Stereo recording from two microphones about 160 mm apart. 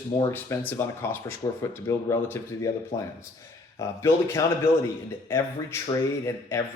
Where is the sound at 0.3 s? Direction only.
15° left (ahead or behind).